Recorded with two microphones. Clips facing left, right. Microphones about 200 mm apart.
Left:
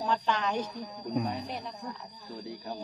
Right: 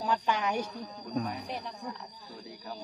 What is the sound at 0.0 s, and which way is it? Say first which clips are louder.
Speech: even; 10° right (ahead or behind).